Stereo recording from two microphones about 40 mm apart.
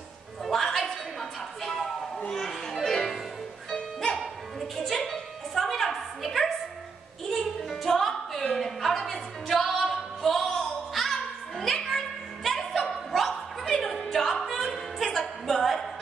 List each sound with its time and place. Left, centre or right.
0.5 s music: centre
1.6 s a sound: centre
2.1 s children playing: centre
3.7 s music: centre
4.2 s music: centre
12.4 s a sound: centre